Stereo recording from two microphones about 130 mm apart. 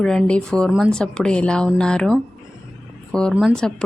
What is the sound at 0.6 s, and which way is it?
Speech, 5° right (ahead or behind).